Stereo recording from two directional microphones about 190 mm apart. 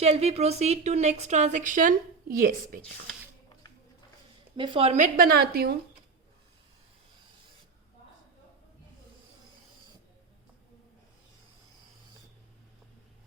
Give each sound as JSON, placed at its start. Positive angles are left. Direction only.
{"t": 0.0, "sound": "a woman's voice", "side_deg": -35}
{"t": 4.5, "sound": "a woman's voice", "side_deg": -25}